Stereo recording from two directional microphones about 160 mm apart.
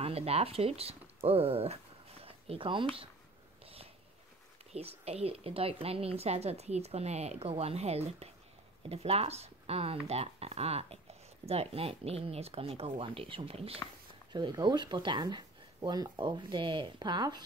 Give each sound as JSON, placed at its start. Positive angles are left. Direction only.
{"t": 0.0, "sound": "speech", "side_deg": -40}
{"t": 3.6, "sound": "a sound", "side_deg": -40}
{"t": 4.7, "sound": "speech", "side_deg": -40}
{"t": 14.3, "sound": "speech", "side_deg": -25}